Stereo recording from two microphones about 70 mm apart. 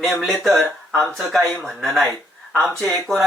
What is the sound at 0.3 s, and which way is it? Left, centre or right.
Speech, centre.